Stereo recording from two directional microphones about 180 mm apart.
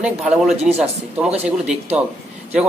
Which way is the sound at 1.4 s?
5° right (ahead or behind).